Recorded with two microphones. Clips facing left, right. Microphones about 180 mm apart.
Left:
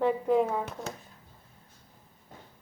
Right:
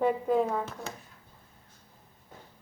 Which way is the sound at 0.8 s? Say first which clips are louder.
Left 2 dB; 25° left (ahead or behind).